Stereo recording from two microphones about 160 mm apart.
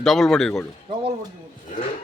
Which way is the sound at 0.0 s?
Centre (ahead or behind).